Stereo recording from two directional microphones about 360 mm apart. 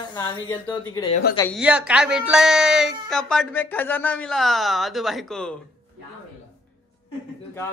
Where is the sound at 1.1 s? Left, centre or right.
Left.